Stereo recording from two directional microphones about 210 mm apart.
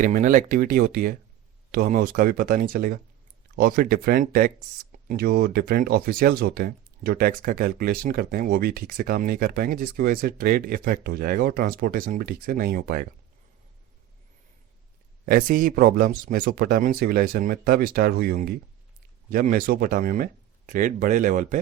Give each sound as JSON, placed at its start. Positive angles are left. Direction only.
{"t": 0.0, "sound": "speech", "side_deg": -40}
{"t": 15.3, "sound": "speech", "side_deg": -40}